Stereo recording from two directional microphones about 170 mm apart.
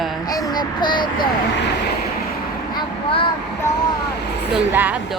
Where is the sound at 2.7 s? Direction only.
30° left (ahead or behind).